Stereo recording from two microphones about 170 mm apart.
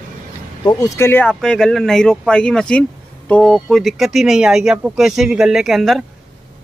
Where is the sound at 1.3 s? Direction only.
5° left (ahead or behind).